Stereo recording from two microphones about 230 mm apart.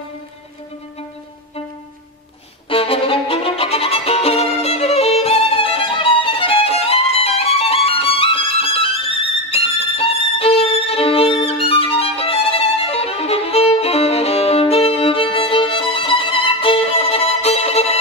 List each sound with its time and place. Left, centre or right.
2.7 s violin: left